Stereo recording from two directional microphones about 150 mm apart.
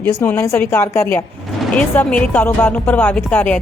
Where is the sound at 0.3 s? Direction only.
15° left (ahead or behind).